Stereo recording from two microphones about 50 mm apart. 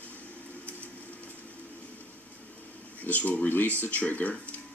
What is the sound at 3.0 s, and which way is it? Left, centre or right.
Speech, left.